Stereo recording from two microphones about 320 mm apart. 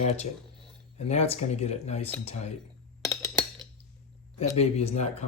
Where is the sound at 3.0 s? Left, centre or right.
Centre.